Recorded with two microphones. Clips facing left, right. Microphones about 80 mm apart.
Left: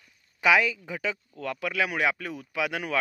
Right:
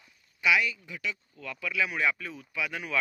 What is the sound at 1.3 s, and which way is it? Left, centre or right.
Speech, left.